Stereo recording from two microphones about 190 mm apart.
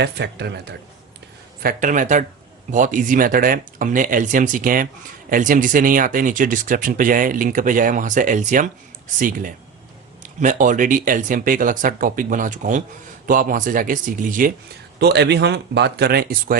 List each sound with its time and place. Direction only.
0.0 s speech: 60° right (ahead or behind)
1.6 s speech: 45° right (ahead or behind)
14.9 s speech: 60° right (ahead or behind)